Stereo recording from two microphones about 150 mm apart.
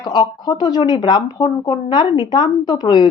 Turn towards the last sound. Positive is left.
turn(degrees=30)  # may be behind; listen again after turning